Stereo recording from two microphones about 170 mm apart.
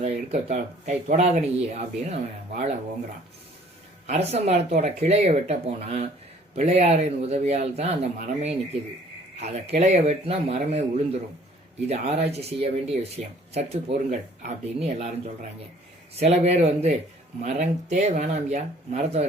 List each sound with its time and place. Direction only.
0.0 s speech: 40° right (ahead or behind)
4.0 s speech: 40° right (ahead or behind)